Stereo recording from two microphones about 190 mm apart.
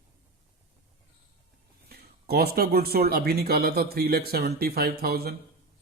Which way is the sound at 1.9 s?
55° right (ahead or behind).